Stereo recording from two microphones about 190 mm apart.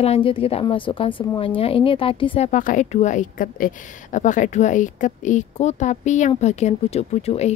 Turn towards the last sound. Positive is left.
turn(degrees=35)  # may be behind; listen again after turning